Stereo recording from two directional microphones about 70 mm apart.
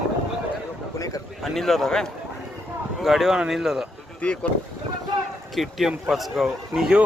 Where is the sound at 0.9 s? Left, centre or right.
Left.